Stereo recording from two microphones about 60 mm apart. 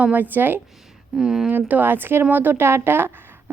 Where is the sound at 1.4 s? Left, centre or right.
Right.